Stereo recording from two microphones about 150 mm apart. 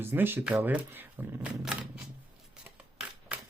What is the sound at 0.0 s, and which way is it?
Speech, 15° right (ahead or behind).